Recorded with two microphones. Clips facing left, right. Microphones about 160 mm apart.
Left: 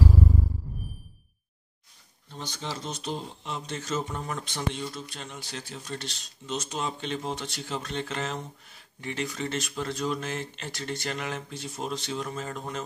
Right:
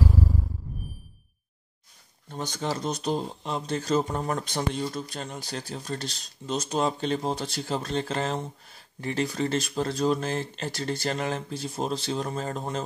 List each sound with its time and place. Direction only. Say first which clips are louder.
2.2 s speech: right 6 dB; 45° right (ahead or behind)